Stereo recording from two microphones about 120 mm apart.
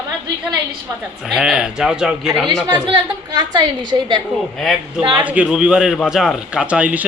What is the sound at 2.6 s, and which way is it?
A woman's voice, 35° right (ahead or behind).